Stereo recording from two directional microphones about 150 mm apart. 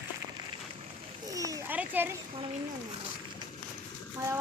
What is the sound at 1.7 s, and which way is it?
Children playing, 10° right (ahead or behind).